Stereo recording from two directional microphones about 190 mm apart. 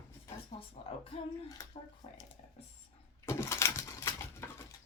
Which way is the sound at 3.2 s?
15° left (ahead or behind).